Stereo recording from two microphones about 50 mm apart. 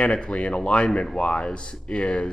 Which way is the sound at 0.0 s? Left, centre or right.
Centre.